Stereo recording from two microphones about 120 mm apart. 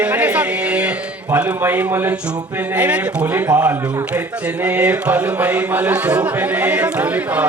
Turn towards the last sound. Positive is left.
turn(degrees=-10)  # may be behind; listen again after turning